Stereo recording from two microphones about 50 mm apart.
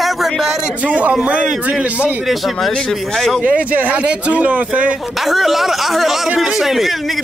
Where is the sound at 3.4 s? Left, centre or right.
Right.